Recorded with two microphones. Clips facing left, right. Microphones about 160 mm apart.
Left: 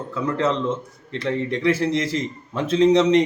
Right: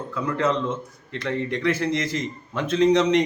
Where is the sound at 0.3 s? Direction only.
30° left (ahead or behind).